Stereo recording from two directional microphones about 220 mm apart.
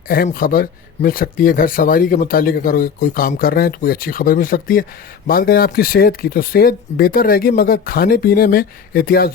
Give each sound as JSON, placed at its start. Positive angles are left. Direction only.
{"t": 0.1, "sound": "speech", "side_deg": 40}